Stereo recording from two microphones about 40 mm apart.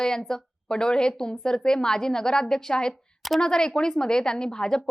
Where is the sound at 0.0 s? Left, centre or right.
Centre.